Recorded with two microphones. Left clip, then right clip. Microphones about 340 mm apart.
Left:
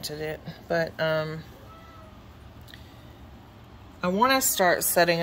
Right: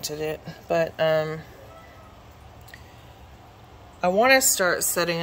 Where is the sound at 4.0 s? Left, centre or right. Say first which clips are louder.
Right 5 dB; centre.